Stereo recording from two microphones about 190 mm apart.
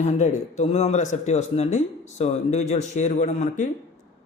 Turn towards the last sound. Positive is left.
turn(degrees=35)  # may be behind; listen again after turning